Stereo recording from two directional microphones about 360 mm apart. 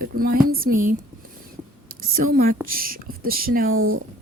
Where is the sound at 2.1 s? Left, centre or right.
Right.